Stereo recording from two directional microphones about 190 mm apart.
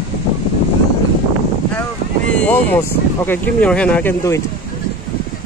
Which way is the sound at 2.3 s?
5° left (ahead or behind).